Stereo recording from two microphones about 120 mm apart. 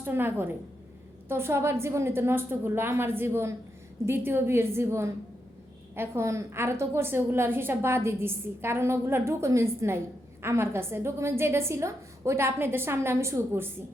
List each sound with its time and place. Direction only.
0.0 s a woman's voice: 20° right (ahead or behind)